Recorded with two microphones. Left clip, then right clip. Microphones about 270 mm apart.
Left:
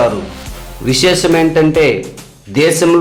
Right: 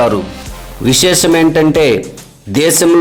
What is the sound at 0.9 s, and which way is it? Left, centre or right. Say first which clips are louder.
A man's voice: right 1 dB; centre.